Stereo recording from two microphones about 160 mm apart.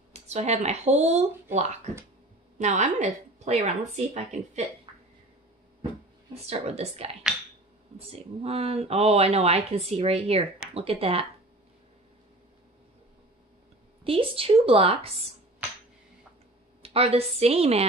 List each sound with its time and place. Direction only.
0.1 s a woman's voice: 45° right (ahead or behind)
6.4 s speech: 40° right (ahead or behind)
14.0 s speech: 35° right (ahead or behind)
16.8 s speech: 40° right (ahead or behind)